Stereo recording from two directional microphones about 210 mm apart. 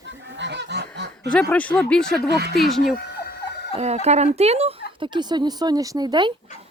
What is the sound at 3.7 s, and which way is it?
Chicken, 30° right (ahead or behind).